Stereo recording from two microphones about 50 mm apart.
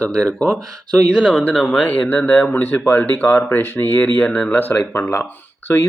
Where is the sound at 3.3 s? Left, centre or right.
Left.